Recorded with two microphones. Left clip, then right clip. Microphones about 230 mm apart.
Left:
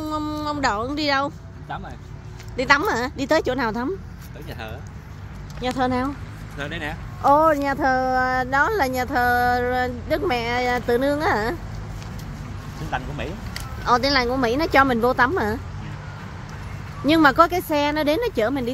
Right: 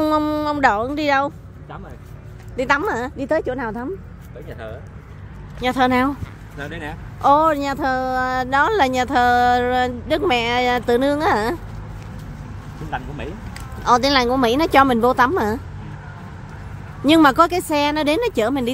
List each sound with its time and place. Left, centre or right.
0.0 s speech: centre
2.5 s a woman's voice: centre
4.5 s speech: left
5.6 s speech: centre
6.6 s a woman's voice: centre
7.2 s a woman's voice: centre
8.3 s speech: right
12.9 s speech: centre
13.8 s speech: right
17.0 s speech: right